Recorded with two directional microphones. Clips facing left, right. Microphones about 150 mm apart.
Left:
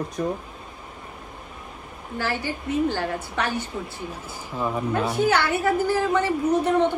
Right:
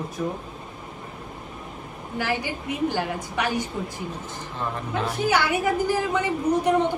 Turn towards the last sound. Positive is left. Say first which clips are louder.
# left 1 dB
turn(degrees=-15)  # may be behind; listen again after turning